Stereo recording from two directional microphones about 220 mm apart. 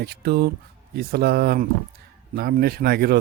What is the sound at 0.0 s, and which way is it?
Speech, 45° right (ahead or behind).